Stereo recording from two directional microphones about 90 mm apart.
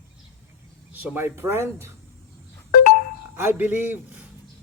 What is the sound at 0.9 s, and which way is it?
Speech, 20° right (ahead or behind).